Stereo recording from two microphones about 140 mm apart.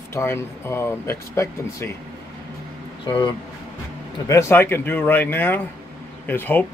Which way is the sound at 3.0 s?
30° left (ahead or behind).